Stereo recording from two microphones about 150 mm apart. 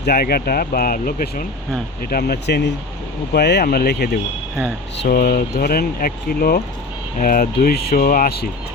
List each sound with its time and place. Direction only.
0.0 s speech: 90° left
2.0 s speech: 90° left